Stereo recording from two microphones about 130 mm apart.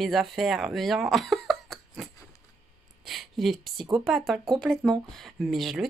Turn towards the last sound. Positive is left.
turn(degrees=0)  # may be behind; listen again after turning